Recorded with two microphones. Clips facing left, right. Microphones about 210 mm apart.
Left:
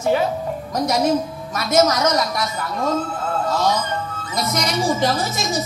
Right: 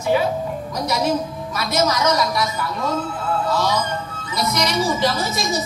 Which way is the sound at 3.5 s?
50° left (ahead or behind).